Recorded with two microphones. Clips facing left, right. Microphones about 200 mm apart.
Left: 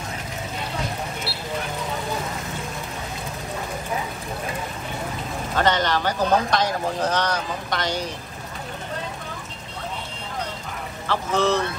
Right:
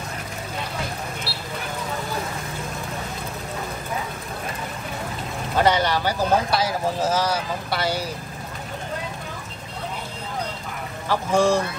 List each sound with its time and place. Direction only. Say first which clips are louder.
5.6 s speech: right 2 dB; 10° right (ahead or behind)
11.1 s speech: right 2 dB; 10° right (ahead or behind)